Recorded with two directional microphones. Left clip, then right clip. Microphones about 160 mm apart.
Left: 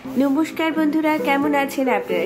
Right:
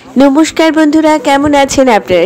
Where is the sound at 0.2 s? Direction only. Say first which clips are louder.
Right 13 dB; 55° right (ahead or behind).